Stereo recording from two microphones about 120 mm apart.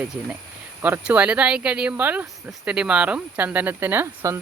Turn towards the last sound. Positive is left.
turn(degrees=-20)  # may be behind; listen again after turning